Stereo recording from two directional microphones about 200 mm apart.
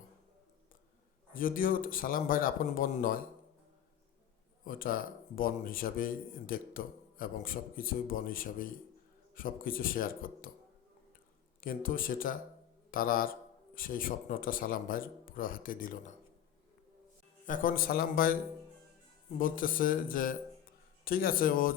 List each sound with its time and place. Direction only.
1.3 s a man's voice: 45° left (ahead or behind)
4.6 s a man's voice: 45° left (ahead or behind)
11.6 s a man's voice: 45° left (ahead or behind)
17.4 s a man's voice: 40° left (ahead or behind)
19.4 s a man's voice: 45° left (ahead or behind)